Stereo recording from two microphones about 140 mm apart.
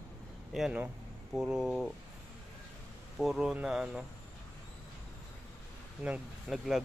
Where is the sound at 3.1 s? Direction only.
Centre (ahead or behind).